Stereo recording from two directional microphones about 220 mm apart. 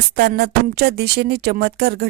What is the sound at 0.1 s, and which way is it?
Speech, 45° right (ahead or behind).